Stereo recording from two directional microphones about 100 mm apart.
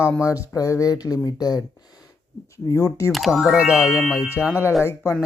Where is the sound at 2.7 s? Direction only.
35° left (ahead or behind).